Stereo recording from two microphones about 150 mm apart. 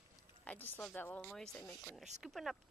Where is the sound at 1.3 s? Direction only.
5° left (ahead or behind).